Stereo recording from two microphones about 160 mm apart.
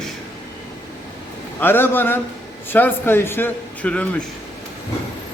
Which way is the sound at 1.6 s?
15° left (ahead or behind).